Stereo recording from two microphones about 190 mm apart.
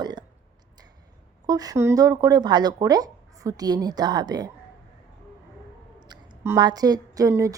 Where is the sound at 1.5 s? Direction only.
20° right (ahead or behind).